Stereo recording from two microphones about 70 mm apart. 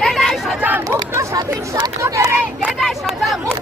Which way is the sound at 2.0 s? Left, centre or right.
Right.